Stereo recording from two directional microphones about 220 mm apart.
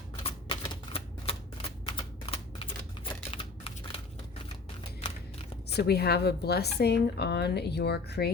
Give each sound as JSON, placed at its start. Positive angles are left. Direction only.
{"t": 0.2, "sound": "typewriter", "side_deg": 25}
{"t": 5.6, "sound": "speech", "side_deg": 45}